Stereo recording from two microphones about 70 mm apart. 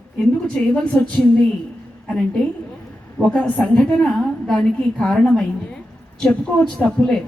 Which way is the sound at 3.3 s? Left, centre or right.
Centre.